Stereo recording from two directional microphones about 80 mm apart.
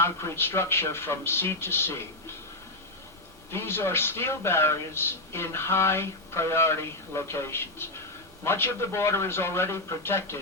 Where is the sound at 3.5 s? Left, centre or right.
Left.